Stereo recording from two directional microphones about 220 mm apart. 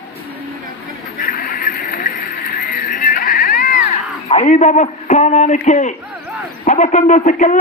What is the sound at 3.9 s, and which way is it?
A man's voice, 30° left (ahead or behind).